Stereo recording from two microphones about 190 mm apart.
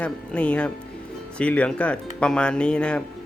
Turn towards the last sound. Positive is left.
turn(degrees=5)  # may be behind; listen again after turning